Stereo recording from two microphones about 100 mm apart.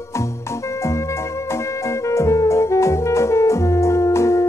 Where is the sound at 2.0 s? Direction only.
30° left (ahead or behind).